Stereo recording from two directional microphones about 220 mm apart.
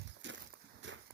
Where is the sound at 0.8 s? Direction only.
55° right (ahead or behind).